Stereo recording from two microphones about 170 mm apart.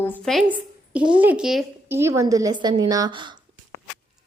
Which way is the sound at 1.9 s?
15° right (ahead or behind).